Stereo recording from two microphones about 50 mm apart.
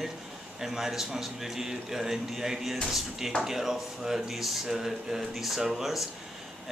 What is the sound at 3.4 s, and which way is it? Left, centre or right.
Speech, centre.